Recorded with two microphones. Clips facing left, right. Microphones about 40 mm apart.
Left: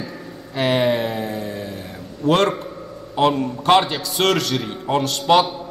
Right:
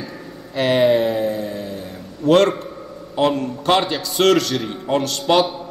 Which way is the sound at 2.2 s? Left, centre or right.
Centre.